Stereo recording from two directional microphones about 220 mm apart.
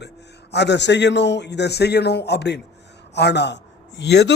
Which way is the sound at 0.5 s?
50° left (ahead or behind).